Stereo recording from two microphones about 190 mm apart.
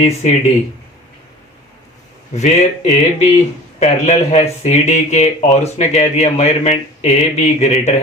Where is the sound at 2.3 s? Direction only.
35° left (ahead or behind).